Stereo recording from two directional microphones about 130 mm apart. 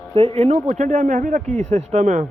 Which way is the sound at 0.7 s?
85° right.